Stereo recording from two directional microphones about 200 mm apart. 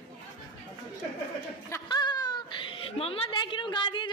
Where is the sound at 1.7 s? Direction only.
20° left (ahead or behind).